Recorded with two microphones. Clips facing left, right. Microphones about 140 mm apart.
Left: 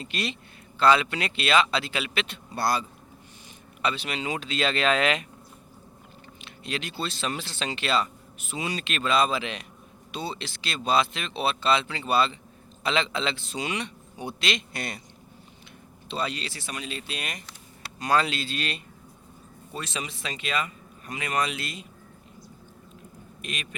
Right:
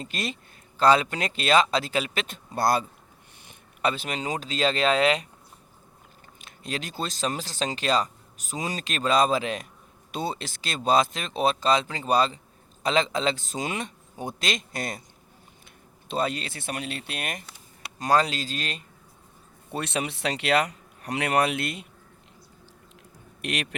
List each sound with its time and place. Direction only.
0.0 s speech: 45° right (ahead or behind)
3.8 s speech: 45° right (ahead or behind)
6.4 s speech: 45° right (ahead or behind)
16.0 s speech: 50° right (ahead or behind)
18.0 s speech: 40° right (ahead or behind)
19.7 s speech: 60° right (ahead or behind)
23.4 s speech: 70° right (ahead or behind)